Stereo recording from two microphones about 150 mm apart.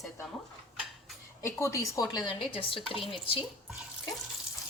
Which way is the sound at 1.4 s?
20° left (ahead or behind).